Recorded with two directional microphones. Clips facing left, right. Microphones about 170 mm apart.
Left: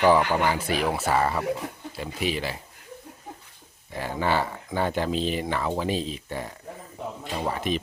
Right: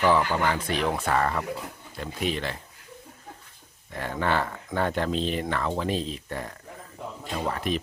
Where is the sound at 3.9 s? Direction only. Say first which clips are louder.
Left 1 dB; 5° left (ahead or behind).